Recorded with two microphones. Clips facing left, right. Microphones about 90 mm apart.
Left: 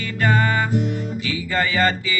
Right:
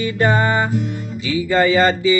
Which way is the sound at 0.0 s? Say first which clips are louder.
Right 3 dB; 20° right (ahead or behind).